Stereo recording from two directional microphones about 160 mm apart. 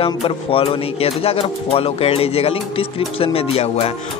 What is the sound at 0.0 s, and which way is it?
Speech, 35° left (ahead or behind).